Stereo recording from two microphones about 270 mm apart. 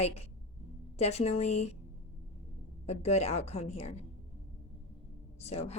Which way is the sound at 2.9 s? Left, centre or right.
Left.